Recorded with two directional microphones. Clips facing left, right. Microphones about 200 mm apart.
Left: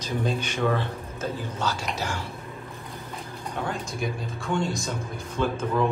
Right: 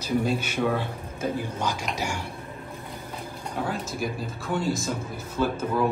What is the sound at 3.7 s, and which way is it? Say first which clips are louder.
Speech: even; centre (ahead or behind).